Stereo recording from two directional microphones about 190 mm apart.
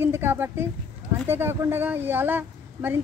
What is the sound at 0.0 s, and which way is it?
A woman's voice, 10° right (ahead or behind).